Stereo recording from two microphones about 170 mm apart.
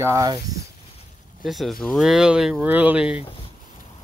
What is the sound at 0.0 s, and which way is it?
Speech, 20° right (ahead or behind).